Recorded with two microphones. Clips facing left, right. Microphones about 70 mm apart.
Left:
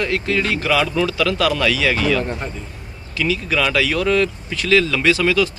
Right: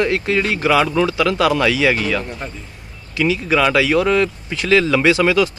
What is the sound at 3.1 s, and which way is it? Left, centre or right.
Speech, right.